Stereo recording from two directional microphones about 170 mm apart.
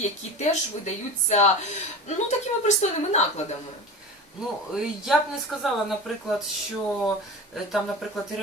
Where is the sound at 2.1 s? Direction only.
40° left (ahead or behind).